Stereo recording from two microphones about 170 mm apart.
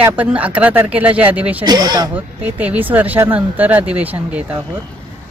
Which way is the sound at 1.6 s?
25° right (ahead or behind).